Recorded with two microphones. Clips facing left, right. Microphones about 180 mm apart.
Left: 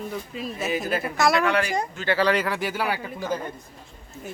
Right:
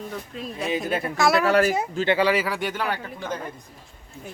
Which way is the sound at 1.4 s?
40° right (ahead or behind).